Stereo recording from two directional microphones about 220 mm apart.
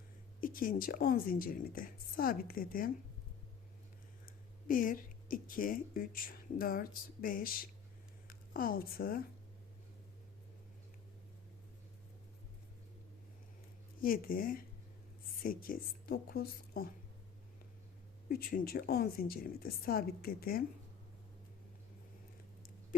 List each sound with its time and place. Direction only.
0.4 s speech: 40° left (ahead or behind)
4.7 s speech: 40° left (ahead or behind)
14.0 s a woman's voice: 40° left (ahead or behind)
18.3 s a woman's voice: 45° left (ahead or behind)